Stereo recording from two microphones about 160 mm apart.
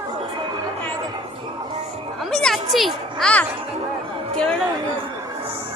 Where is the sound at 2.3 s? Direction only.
5° left (ahead or behind).